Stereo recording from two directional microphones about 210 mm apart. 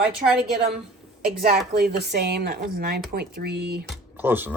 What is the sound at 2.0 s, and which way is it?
Speech, 50° right (ahead or behind).